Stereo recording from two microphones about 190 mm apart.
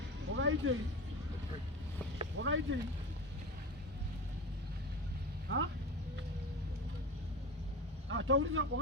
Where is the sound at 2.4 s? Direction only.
75° right (ahead or behind).